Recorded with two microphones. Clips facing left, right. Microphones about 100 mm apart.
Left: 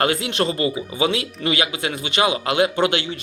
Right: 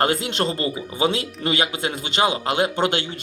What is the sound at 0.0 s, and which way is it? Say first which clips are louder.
Speech: left 1 dB; 35° right (ahead or behind).